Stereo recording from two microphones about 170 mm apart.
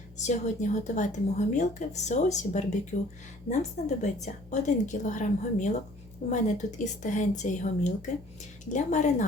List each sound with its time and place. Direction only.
0.2 s a woman's voice: 45° left (ahead or behind)